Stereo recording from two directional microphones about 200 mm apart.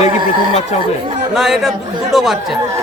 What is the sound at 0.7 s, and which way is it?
Speech, 35° left (ahead or behind).